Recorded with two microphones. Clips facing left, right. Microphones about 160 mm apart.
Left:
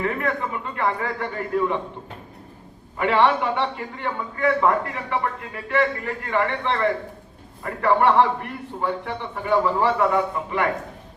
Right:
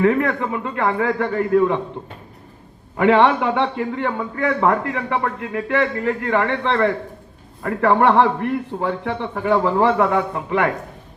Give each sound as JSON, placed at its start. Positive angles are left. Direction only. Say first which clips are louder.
{"t": 0.0, "sound": "a man's voice", "louder": "right 7 dB", "side_deg": -55}
{"t": 3.0, "sound": "a man's voice", "louder": "right 5 dB", "side_deg": -60}